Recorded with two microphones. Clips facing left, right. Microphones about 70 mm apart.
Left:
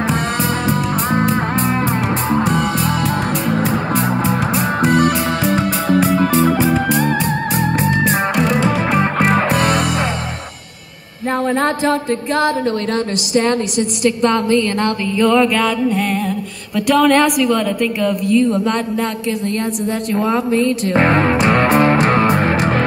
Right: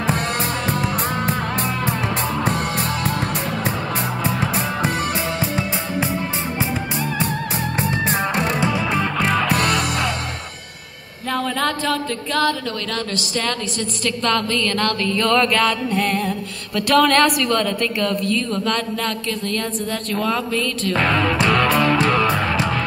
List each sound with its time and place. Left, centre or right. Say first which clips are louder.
1.3 s music: left 6 dB; left
2.5 s music: left 5 dB; left
7.0 s music: left 6 dB; left
11.3 s speech: left 5 dB; left